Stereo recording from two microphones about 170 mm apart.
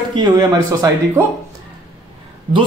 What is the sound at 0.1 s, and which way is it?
A man's voice, 25° right (ahead or behind).